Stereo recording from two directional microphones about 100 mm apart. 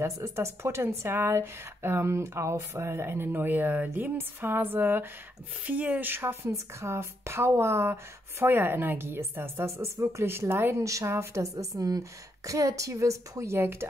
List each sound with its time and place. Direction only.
0.0 s speech: 30° right (ahead or behind)